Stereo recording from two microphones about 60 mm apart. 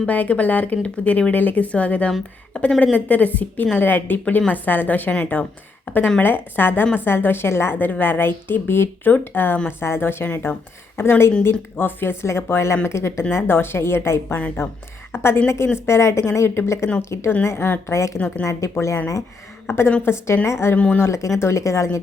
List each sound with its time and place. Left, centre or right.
0.0 s a woman's voice: left
19.6 s a woman's voice: left
20.7 s a woman's voice: left
21.0 s speech: left